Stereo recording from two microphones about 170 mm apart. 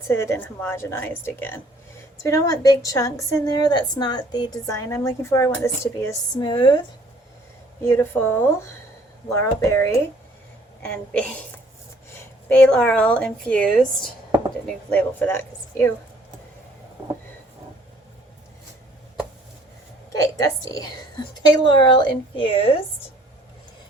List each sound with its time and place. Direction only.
0.1 s a woman's voice: 15° left (ahead or behind)
7.8 s a woman's voice: 15° left (ahead or behind)
20.1 s a woman's voice: 20° left (ahead or behind)